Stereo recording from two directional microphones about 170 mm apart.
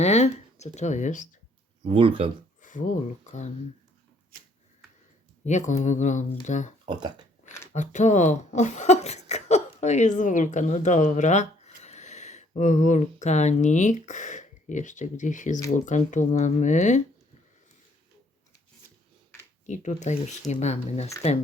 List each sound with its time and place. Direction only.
0.0 s speech: 40° left (ahead or behind)
1.9 s speech: 30° right (ahead or behind)
2.6 s speech: 50° left (ahead or behind)
5.5 s speech: 45° left (ahead or behind)
6.8 s speech: 25° right (ahead or behind)
7.7 s speech: 45° left (ahead or behind)
19.6 s speech: 45° left (ahead or behind)